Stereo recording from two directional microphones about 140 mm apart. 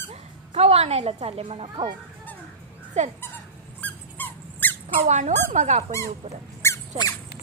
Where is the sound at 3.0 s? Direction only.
55° right (ahead or behind).